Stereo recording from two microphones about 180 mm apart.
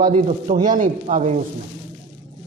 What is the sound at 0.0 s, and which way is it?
Speech, 40° right (ahead or behind).